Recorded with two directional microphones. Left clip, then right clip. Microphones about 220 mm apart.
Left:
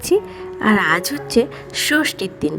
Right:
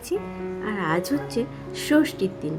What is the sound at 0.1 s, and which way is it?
A woman's voice, 45° left (ahead or behind).